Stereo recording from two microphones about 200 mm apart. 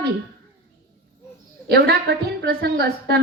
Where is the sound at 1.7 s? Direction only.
50° right (ahead or behind).